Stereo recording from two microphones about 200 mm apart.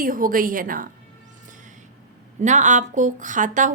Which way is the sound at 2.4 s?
35° right (ahead or behind).